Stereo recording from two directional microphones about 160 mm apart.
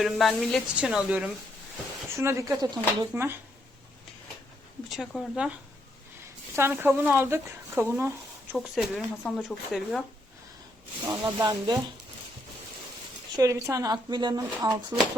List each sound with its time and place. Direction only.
0.0 s speech: centre (ahead or behind)
2.0 s speech: 15° right (ahead or behind)
3.1 s speech: 15° right (ahead or behind)
4.9 s speech: centre (ahead or behind)
6.6 s speech: 15° right (ahead or behind)
11.4 s speech: 25° right (ahead or behind)
13.3 s speech: 20° right (ahead or behind)